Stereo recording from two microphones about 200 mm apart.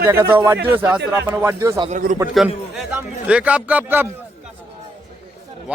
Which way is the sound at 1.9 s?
45° right (ahead or behind).